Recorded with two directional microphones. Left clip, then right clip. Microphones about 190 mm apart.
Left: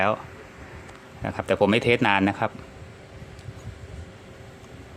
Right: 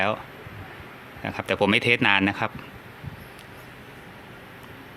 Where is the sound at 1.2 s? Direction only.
5° left (ahead or behind).